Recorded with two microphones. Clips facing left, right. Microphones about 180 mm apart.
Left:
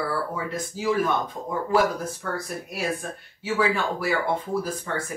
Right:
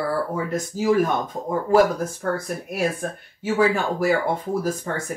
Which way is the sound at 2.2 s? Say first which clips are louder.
Right 5 dB; 45° right (ahead or behind).